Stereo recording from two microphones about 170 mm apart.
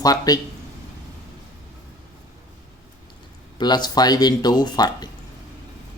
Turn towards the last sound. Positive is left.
turn(degrees=25)  # may be behind; listen again after turning